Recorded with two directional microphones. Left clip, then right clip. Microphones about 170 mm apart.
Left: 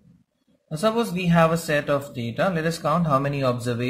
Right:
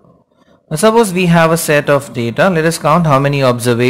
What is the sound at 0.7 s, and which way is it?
Speech, 35° right (ahead or behind).